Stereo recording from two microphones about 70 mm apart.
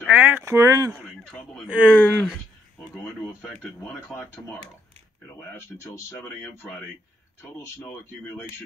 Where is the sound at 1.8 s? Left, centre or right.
Centre.